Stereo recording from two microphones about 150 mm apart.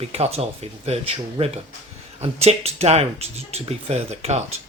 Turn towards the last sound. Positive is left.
turn(degrees=-45)  # may be behind; listen again after turning